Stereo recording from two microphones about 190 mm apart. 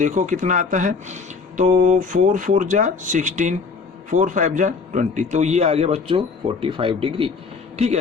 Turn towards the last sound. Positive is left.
turn(degrees=-35)  # may be behind; listen again after turning